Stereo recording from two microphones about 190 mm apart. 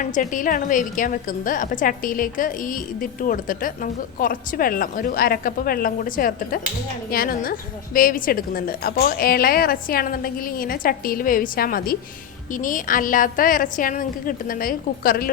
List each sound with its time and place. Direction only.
0.0 s a woman's voice: 40° left (ahead or behind)